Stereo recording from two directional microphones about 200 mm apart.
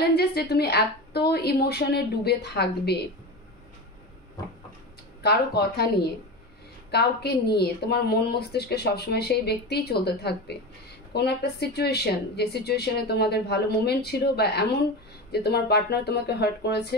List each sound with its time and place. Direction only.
0.0 s speech: 55° left (ahead or behind)
5.2 s speech: 55° left (ahead or behind)